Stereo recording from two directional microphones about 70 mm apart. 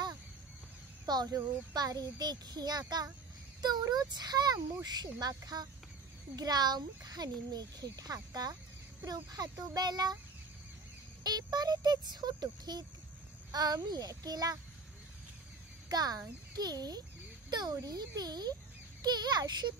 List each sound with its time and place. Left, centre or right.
1.0 s speech: right
3.9 s speech: right
11.2 s speech: right
13.5 s speech: right
15.9 s speech: right
17.5 s speech: right
17.8 s speech: right
19.0 s a child's voice: right